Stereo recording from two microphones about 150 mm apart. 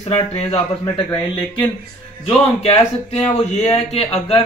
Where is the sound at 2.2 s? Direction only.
40° left (ahead or behind).